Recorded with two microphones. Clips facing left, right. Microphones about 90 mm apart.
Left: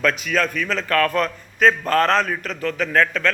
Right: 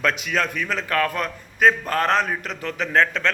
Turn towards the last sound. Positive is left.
turn(degrees=-25)  # may be behind; listen again after turning